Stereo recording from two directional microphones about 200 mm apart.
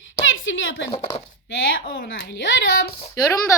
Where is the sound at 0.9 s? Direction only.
25° left (ahead or behind).